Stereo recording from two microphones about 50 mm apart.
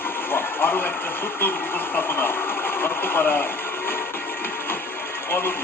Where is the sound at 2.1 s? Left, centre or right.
Left.